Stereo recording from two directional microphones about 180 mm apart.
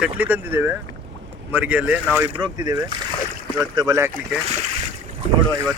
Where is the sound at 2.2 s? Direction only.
20° right (ahead or behind).